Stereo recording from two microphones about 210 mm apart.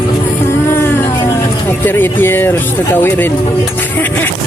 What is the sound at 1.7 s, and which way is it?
Speech, 10° left (ahead or behind).